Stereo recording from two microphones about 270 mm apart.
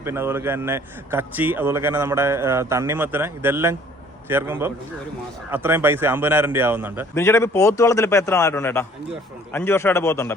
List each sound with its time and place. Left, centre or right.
0.0 s a man's voice: centre
7.1 s speech: centre